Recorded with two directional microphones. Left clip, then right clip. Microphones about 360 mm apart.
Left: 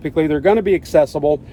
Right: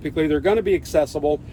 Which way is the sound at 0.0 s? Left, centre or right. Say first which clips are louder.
Left 4 dB; left.